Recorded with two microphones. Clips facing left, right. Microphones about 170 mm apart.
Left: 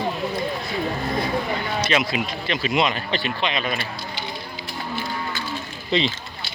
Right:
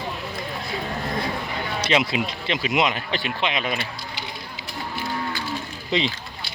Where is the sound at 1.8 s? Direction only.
25° right (ahead or behind).